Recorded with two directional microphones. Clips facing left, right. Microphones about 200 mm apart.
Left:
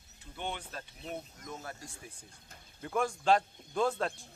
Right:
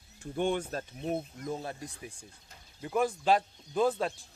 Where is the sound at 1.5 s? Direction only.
25° right (ahead or behind).